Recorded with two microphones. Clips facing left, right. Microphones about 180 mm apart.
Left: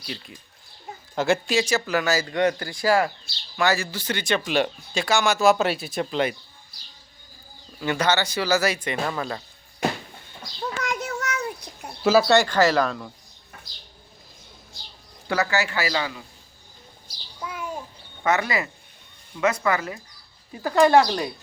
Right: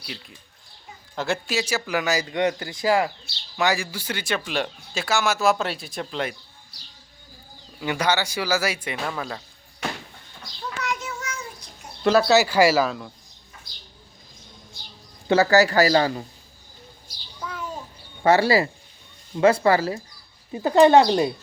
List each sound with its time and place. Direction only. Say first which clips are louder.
0.0 s speech: left 3 dB; 5° right (ahead or behind)
7.8 s speech: left 1 dB; 10° right (ahead or behind)
10.6 s a sound: left 2 dB; 50° left (ahead or behind)
12.0 s speech: even; 5° left (ahead or behind)
12.4 s speech: right 2 dB; 10° right (ahead or behind)
15.3 s speech: right 7 dB; 35° right (ahead or behind)
17.4 s a sound: left 1 dB; 10° left (ahead or behind)
18.2 s speech: right 6 dB; 30° right (ahead or behind)